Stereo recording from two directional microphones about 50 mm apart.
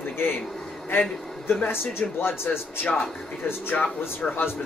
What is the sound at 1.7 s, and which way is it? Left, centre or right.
Speech, left.